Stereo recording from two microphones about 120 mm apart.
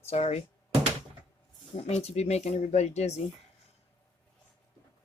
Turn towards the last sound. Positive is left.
turn(degrees=65)  # may be behind; listen again after turning